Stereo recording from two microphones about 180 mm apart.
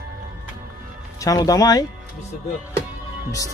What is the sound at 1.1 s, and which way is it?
Speech, 20° left (ahead or behind).